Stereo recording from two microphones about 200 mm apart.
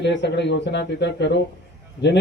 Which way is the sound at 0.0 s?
60° left (ahead or behind).